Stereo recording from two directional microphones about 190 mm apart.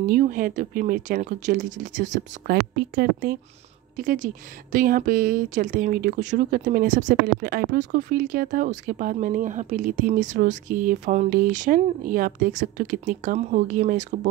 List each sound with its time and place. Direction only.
0.1 s speech: 45° right (ahead or behind)